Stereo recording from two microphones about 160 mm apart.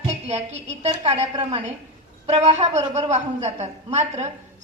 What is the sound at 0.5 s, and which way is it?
A woman's voice, 45° right (ahead or behind).